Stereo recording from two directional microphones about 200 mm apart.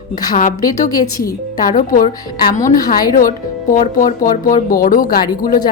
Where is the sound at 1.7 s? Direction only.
45° left (ahead or behind).